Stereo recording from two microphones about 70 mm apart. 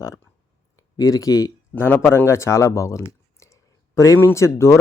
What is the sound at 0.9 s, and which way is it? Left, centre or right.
Speech, left.